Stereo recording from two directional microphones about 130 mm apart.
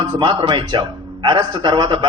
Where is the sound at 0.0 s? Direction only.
40° right (ahead or behind).